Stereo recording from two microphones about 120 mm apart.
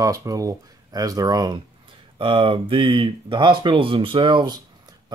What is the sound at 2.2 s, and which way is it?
Speech, 45° right (ahead or behind).